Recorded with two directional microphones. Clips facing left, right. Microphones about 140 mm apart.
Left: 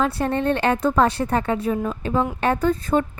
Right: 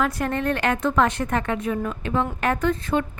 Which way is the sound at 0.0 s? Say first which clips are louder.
Left 2 dB; 30° left (ahead or behind).